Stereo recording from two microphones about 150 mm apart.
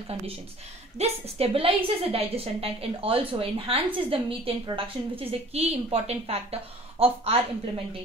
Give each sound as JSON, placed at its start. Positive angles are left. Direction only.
{"t": 0.9, "sound": "a woman's voice", "side_deg": -45}